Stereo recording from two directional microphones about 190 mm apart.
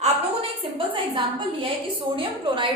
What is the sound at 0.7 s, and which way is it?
A woman's voice, 25° right (ahead or behind).